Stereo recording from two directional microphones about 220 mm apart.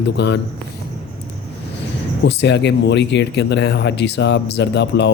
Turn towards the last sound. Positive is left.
turn(degrees=50)  # may be behind; listen again after turning